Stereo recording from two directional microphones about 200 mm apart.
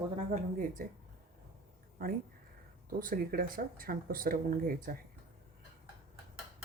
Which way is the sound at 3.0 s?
45° right (ahead or behind).